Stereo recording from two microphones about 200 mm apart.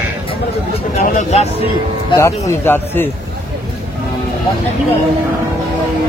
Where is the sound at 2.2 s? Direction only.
15° left (ahead or behind).